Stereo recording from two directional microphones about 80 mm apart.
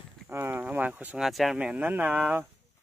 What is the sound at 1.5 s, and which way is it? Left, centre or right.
Speech, centre.